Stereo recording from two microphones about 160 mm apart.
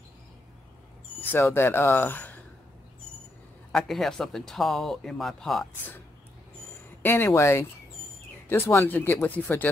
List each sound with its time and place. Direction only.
1.3 s speech: 15° left (ahead or behind)
3.7 s speech: centre (ahead or behind)
7.0 s speech: 15° left (ahead or behind)